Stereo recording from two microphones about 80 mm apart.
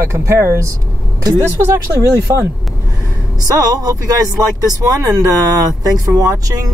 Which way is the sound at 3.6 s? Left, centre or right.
Right.